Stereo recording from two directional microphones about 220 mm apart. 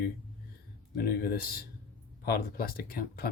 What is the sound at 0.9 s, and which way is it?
Speech, 45° left (ahead or behind).